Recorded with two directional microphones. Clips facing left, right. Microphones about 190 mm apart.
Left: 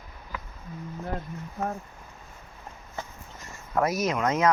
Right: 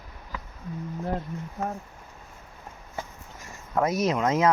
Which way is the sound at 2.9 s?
10° right (ahead or behind).